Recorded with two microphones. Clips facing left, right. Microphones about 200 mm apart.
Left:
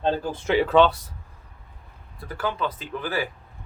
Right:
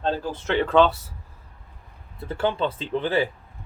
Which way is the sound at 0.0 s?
10° left (ahead or behind).